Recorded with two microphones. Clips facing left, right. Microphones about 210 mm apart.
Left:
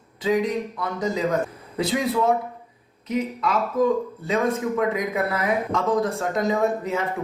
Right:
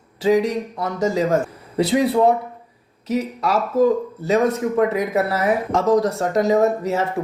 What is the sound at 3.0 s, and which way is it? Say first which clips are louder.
Speech: right 3 dB; 85° right.